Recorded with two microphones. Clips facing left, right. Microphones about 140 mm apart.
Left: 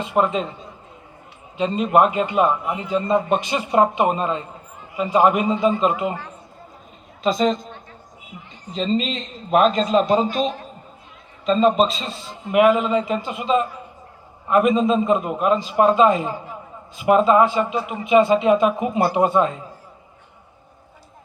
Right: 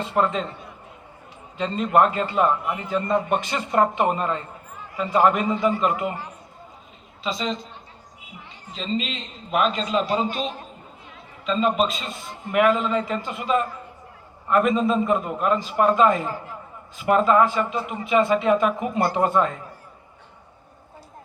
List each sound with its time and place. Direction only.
0.0 s a man's voice: 15° left (ahead or behind)
7.3 s a woman's voice: 45° left (ahead or behind)
8.7 s a man's voice: 40° left (ahead or behind); by 19.6 s 20° left (ahead or behind)